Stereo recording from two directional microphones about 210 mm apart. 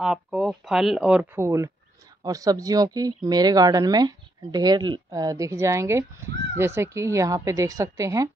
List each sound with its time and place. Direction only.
0.0 s speech: centre (ahead or behind)